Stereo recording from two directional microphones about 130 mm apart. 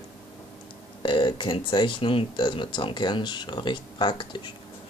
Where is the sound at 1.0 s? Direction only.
35° left (ahead or behind).